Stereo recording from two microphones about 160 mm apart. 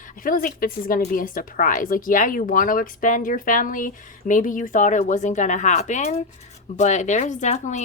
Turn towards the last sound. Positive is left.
turn(degrees=45)  # may be behind; listen again after turning